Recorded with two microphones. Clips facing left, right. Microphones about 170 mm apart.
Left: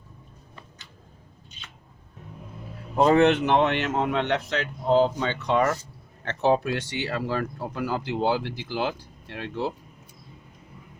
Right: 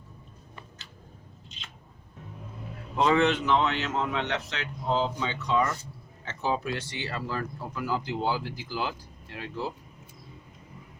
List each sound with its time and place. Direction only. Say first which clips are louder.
2.9 s speech: left 5 dB; 45° left (ahead or behind); by 9.7 s 70° left (ahead or behind)